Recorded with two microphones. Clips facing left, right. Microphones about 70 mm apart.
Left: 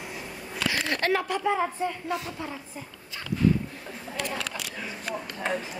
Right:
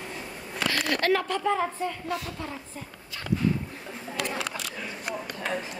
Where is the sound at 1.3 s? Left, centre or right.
Centre.